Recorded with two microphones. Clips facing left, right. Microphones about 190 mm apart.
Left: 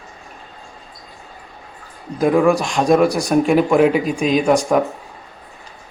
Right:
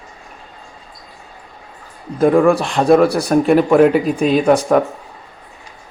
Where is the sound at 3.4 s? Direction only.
Centre (ahead or behind).